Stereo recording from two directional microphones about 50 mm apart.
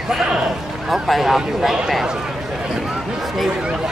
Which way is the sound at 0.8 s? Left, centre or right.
Centre.